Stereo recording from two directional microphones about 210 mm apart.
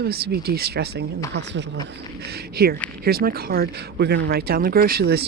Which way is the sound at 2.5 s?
45° right (ahead or behind).